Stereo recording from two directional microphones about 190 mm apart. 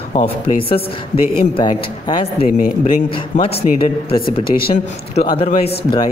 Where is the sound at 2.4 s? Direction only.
45° left (ahead or behind).